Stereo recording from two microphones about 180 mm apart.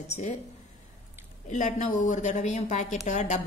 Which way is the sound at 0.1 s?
40° left (ahead or behind).